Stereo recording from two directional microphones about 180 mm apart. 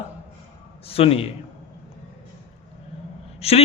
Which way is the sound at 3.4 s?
35° left (ahead or behind).